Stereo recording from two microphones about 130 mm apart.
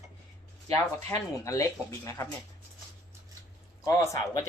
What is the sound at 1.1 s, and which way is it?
Speech, 25° left (ahead or behind).